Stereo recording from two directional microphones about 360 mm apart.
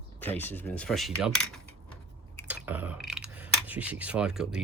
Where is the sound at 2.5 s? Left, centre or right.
Centre.